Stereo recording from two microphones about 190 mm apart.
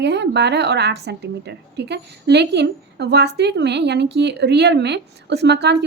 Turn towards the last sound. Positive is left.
turn(degrees=-65)  # may be behind; listen again after turning